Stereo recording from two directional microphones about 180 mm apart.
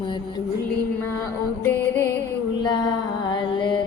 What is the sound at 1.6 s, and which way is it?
Music, 10° left (ahead or behind).